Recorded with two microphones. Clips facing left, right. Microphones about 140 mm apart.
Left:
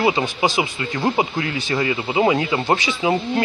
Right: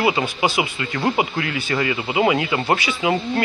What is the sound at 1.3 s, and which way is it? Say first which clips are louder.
Speech: left 1 dB; 20° left (ahead or behind).